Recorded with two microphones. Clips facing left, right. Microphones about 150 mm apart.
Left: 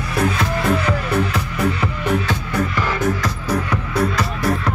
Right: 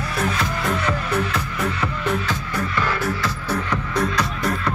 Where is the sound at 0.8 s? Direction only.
10° left (ahead or behind).